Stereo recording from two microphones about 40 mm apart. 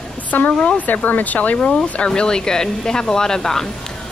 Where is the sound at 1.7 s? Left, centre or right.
Left.